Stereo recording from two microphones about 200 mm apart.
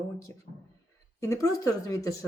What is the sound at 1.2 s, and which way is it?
Speech, 15° left (ahead or behind).